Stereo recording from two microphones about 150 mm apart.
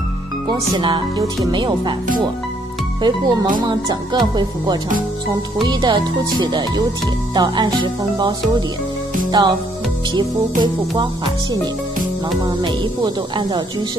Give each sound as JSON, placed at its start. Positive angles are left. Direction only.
{"t": 0.5, "sound": "speech", "side_deg": -30}
{"t": 3.0, "sound": "speech", "side_deg": -30}
{"t": 5.3, "sound": "speech", "side_deg": -30}
{"t": 12.4, "sound": "speech", "side_deg": -30}